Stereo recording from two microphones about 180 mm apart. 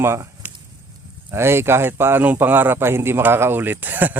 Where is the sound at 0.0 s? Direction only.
15° right (ahead or behind).